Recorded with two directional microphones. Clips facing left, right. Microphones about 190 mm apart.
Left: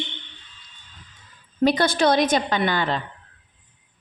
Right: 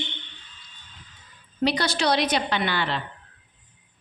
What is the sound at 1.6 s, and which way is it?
A woman's voice, 50° left (ahead or behind).